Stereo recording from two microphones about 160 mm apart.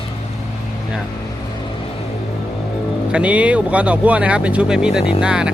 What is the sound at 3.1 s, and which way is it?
Speech, 5° right (ahead or behind).